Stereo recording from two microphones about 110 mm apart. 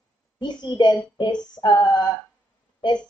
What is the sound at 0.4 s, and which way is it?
Speech, 40° left (ahead or behind).